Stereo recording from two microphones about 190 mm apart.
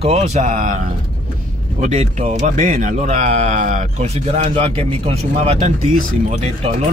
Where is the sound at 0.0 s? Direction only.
35° right (ahead or behind).